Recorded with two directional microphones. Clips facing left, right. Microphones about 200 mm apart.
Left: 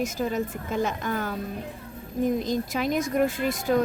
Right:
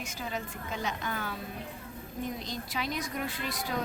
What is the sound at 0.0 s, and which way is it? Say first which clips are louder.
A woman's voice: left 11 dB; 45° left (ahead or behind).